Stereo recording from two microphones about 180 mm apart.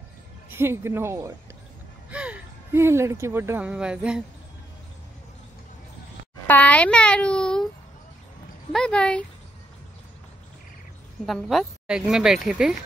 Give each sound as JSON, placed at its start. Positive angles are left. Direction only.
{"t": 0.5, "sound": "speech", "side_deg": -15}
{"t": 6.4, "sound": "a child's voice", "side_deg": 10}
{"t": 8.7, "sound": "speech", "side_deg": 5}
{"t": 11.2, "sound": "speech", "side_deg": 0}